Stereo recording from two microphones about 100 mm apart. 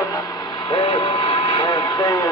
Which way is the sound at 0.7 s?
60° left (ahead or behind).